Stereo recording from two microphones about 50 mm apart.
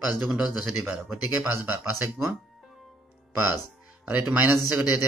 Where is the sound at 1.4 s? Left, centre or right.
Right.